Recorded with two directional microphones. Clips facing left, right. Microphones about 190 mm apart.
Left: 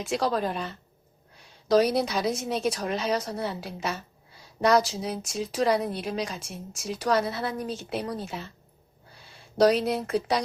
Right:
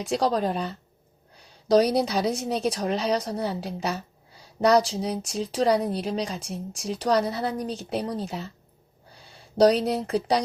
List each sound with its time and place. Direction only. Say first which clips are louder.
0.1 s speech: right 3 dB; 35° right (ahead or behind)
1.7 s speech: right 2 dB; 35° right (ahead or behind)
9.6 s speech: right 2 dB; 35° right (ahead or behind)